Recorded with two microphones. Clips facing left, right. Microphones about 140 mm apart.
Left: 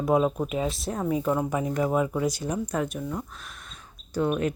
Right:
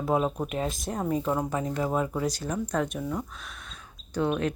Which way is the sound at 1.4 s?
15° left (ahead or behind).